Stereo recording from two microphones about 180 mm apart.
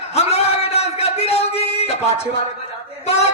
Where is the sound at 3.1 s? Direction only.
35° left (ahead or behind).